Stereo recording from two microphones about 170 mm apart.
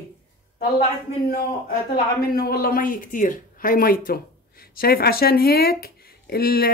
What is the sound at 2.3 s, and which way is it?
Speech, 65° left (ahead or behind).